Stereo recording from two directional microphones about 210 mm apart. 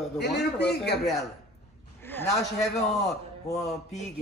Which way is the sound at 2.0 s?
10° left (ahead or behind).